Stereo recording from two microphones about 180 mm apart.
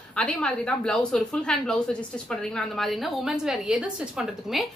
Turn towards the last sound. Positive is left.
turn(degrees=0)  # may be behind; listen again after turning